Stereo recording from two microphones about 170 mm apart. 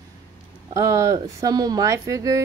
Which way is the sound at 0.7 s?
20° right (ahead or behind).